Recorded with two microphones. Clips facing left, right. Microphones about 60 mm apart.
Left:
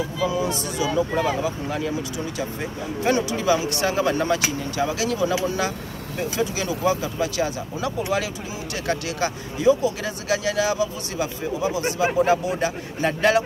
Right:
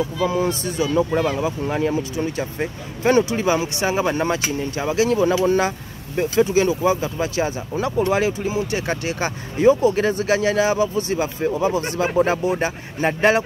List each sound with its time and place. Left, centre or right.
0.3 s speech: right